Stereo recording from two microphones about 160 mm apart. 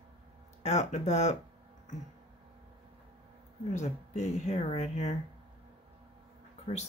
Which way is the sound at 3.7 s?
45° left (ahead or behind).